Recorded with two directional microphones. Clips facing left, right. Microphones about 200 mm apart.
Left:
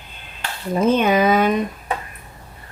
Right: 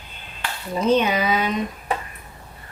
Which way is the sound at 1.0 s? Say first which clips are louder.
Left 5 dB; 50° left (ahead or behind).